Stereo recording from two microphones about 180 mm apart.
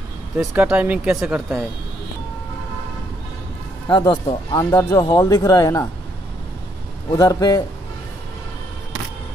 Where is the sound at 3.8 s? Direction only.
25° left (ahead or behind).